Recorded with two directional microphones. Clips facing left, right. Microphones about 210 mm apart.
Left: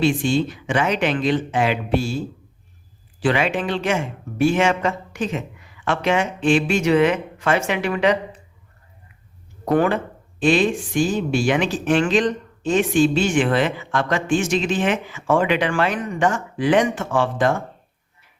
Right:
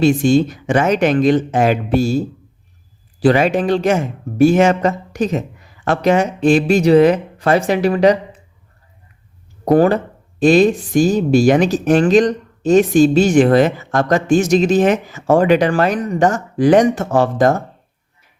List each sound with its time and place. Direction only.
0.0 s speech: 40° right (ahead or behind)
9.6 s speech: 35° right (ahead or behind)